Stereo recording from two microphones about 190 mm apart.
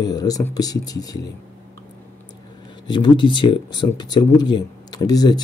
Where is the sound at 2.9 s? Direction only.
25° left (ahead or behind).